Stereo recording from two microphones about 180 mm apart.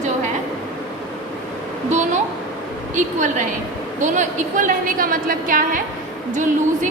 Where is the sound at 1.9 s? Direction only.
40° right (ahead or behind).